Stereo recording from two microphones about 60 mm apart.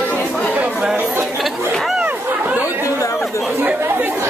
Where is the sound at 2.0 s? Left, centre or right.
Right.